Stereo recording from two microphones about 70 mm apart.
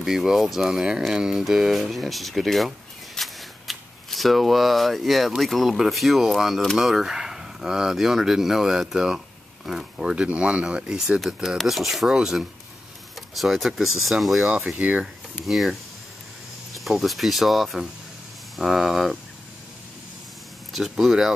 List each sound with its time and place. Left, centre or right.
0.0 s speech: centre
3.2 s shuffling cards: centre
5.4 s speech: centre
14.5 s speech: centre
15.4 s speech: centre
20.7 s speech: centre